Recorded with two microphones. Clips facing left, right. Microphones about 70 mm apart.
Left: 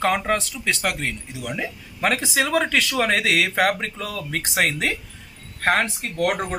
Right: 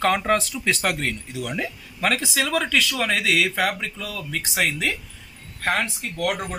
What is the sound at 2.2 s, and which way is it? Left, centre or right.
Speech, left.